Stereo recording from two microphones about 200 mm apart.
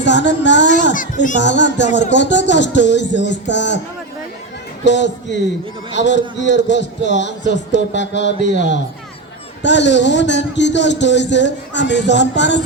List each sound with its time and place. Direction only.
0.0 s a child's voice: 60° left (ahead or behind)
0.9 s a child's voice: 40° left (ahead or behind)
1.4 s a man's voice: 60° left (ahead or behind)
4.9 s a man's voice: 60° left (ahead or behind)